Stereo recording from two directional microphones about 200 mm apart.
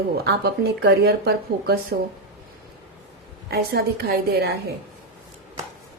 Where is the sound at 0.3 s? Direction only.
55° right (ahead or behind).